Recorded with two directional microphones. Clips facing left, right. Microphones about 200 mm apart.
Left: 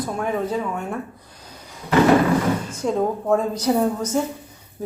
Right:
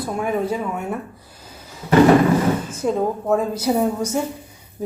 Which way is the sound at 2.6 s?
5° right (ahead or behind).